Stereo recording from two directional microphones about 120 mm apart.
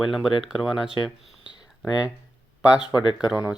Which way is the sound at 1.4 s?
35° left (ahead or behind).